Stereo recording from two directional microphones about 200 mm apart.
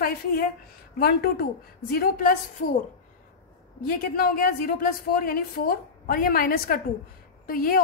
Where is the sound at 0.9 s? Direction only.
50° left (ahead or behind).